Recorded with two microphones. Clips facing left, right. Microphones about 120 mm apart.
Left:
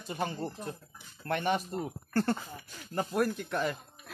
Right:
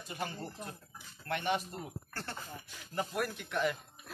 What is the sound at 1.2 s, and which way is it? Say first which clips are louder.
Speech: left 4 dB; 40° left (ahead or behind).